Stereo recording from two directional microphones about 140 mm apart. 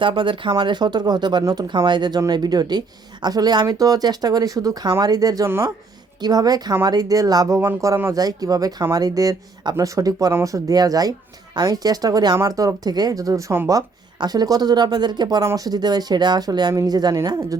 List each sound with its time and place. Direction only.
0.0 s speech: 35° right (ahead or behind)